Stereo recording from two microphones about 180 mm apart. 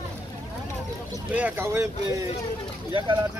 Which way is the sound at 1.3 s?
10° right (ahead or behind).